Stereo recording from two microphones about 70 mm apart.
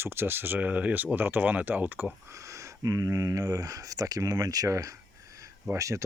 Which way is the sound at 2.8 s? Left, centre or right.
Right.